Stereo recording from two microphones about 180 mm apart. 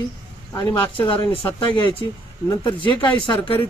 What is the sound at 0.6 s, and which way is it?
Speech, 20° left (ahead or behind).